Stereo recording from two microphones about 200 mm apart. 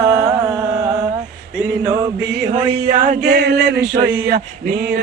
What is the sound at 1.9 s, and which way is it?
Music, 20° right (ahead or behind).